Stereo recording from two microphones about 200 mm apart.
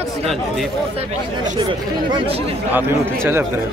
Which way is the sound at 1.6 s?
25° right (ahead or behind).